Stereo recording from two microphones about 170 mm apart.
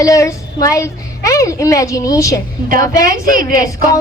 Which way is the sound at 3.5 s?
20° left (ahead or behind).